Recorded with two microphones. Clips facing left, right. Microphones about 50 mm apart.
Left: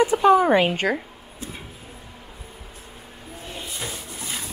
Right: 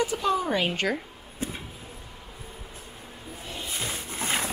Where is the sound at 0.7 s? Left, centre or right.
Centre.